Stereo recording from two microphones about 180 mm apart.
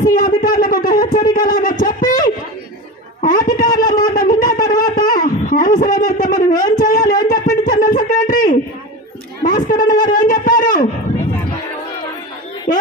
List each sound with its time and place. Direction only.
0.0 s speech: 50° left (ahead or behind)
3.2 s shofar: 50° left (ahead or behind)
6.8 s a sound: 50° left (ahead or behind)
9.4 s a man's voice: 50° left (ahead or behind)